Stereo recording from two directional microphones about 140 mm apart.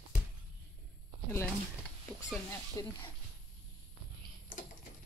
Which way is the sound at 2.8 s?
25° left (ahead or behind).